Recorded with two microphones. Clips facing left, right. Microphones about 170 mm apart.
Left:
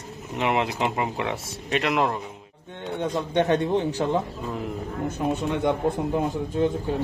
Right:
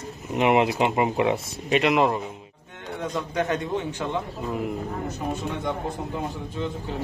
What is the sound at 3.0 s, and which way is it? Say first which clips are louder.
Speech: left 3 dB; 30° left (ahead or behind).